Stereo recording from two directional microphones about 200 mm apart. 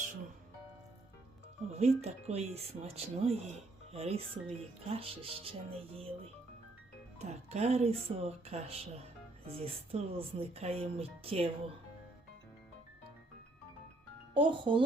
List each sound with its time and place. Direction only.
1.7 s speech: 30° right (ahead or behind)
14.3 s speech: 25° right (ahead or behind)